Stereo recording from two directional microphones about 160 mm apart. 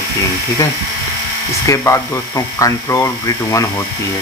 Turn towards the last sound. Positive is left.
turn(degrees=20)  # may be behind; listen again after turning